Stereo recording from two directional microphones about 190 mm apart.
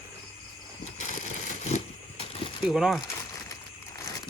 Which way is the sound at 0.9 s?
40° left (ahead or behind).